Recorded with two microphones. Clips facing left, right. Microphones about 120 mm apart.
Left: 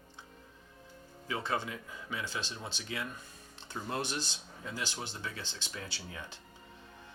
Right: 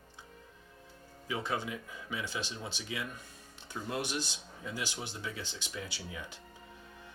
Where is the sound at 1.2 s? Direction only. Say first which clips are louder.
Even; 15° right (ahead or behind).